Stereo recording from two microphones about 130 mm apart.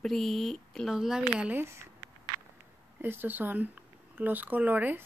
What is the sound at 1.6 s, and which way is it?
Speech, 20° right (ahead or behind).